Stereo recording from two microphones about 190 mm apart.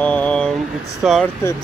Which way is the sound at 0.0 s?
5° left (ahead or behind).